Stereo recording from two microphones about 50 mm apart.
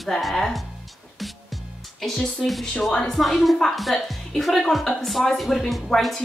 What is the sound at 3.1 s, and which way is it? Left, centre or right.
A woman's voice, centre.